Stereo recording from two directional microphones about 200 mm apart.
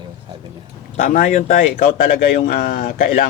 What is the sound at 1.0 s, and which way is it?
Speech, 40° left (ahead or behind).